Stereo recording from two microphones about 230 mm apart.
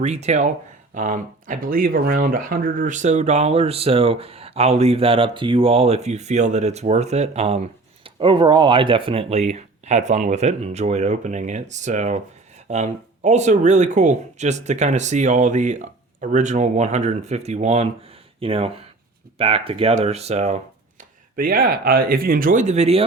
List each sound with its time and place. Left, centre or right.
0.0 s speech: right